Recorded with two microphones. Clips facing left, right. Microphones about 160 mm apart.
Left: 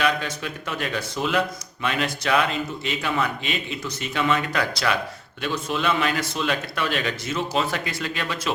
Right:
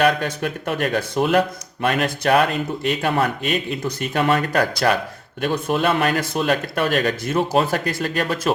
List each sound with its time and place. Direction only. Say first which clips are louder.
0.0 s speech: right 6 dB; 55° right (ahead or behind)